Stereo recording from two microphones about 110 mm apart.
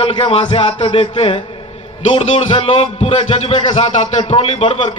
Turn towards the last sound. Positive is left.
turn(degrees=65)  # may be behind; listen again after turning